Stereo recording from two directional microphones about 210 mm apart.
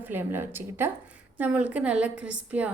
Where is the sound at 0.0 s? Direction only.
10° right (ahead or behind).